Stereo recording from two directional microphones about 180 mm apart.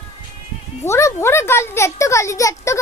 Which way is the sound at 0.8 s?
15° left (ahead or behind).